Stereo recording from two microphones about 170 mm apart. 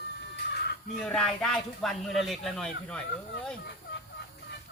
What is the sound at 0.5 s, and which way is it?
Crow, 70° left (ahead or behind).